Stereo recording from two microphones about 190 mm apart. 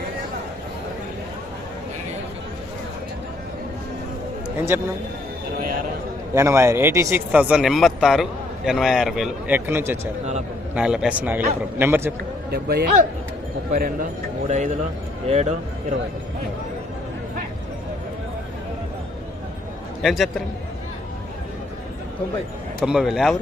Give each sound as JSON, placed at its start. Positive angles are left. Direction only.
{"t": 4.7, "sound": "a man's voice", "side_deg": -10}
{"t": 6.3, "sound": "a man's voice", "side_deg": -15}
{"t": 12.5, "sound": "speech", "side_deg": -55}
{"t": 20.0, "sound": "a man's voice", "side_deg": 0}
{"t": 22.8, "sound": "a man's voice", "side_deg": -5}